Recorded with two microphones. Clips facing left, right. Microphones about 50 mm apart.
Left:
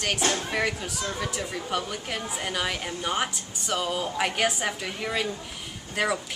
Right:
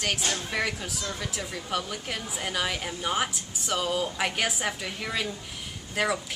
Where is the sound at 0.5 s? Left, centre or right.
Centre.